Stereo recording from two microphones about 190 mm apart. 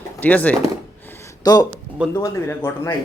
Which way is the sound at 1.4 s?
20° left (ahead or behind).